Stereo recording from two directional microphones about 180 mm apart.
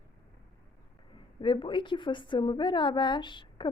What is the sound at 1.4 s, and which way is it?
A woman's voice, 25° left (ahead or behind).